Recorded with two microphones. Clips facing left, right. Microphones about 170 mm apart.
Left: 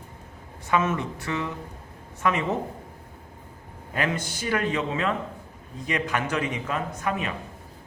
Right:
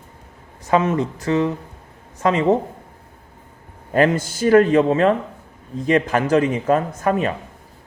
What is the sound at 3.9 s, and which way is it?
A man's voice, 40° right (ahead or behind).